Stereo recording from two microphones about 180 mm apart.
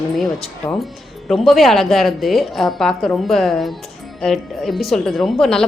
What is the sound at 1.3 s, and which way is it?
A woman's voice, centre (ahead or behind).